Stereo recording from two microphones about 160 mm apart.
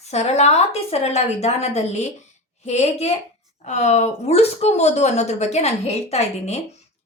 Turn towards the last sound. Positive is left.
turn(degrees=40)  # may be behind; listen again after turning